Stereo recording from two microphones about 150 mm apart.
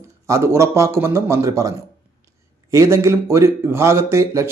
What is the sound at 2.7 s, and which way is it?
Speech, 20° right (ahead or behind).